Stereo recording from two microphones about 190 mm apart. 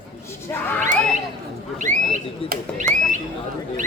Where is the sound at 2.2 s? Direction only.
40° right (ahead or behind).